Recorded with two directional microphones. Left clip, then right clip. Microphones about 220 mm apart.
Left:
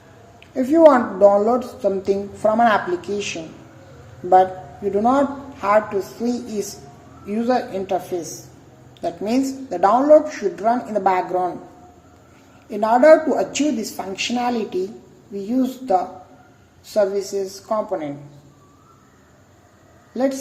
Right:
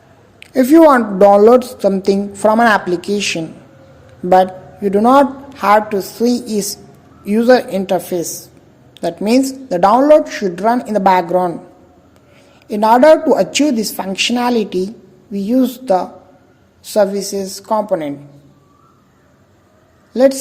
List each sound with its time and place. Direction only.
0.3 s a woman's voice: 50° right (ahead or behind)
12.6 s a woman's voice: 50° right (ahead or behind)